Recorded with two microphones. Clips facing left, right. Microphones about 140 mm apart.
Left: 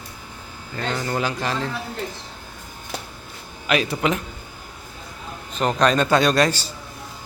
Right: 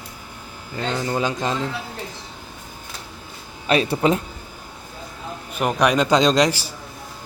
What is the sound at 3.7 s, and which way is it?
Speech, 30° right (ahead or behind).